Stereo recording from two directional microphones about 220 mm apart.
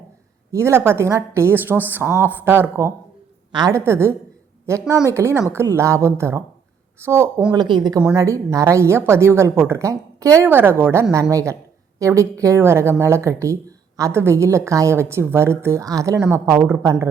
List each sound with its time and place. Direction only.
0.5 s speech: 10° right (ahead or behind)